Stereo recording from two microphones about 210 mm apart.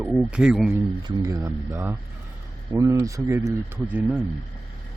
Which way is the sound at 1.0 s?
15° right (ahead or behind).